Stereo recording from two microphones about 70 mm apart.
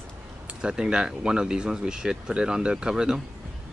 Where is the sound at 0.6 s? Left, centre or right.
Centre.